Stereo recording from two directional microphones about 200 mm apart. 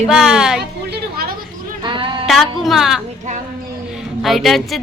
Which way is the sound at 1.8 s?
25° right (ahead or behind).